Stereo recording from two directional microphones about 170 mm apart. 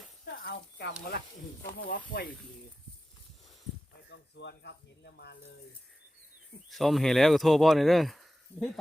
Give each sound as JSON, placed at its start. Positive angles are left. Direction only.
{"t": 0.4, "sound": "speech", "side_deg": 90}
{"t": 1.9, "sound": "speech", "side_deg": 55}
{"t": 4.1, "sound": "speech", "side_deg": 85}
{"t": 6.7, "sound": "speech", "side_deg": 0}